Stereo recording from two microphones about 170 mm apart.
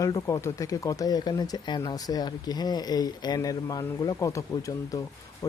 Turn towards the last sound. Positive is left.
turn(degrees=20)  # may be behind; listen again after turning